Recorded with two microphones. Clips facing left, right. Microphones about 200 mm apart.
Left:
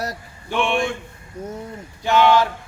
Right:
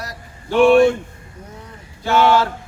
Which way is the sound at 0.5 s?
40° right (ahead or behind).